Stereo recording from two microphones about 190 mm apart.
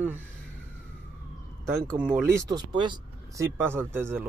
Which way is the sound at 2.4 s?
20° right (ahead or behind).